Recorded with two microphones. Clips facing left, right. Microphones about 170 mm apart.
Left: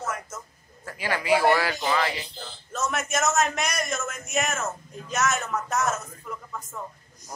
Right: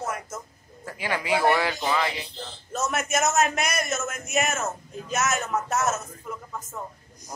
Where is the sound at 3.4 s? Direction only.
5° right (ahead or behind).